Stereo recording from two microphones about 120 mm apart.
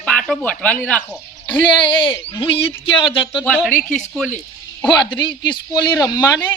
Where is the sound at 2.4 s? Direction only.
50° left (ahead or behind).